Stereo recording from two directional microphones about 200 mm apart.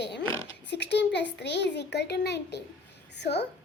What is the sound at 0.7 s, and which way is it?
A child's voice, 60° left (ahead or behind).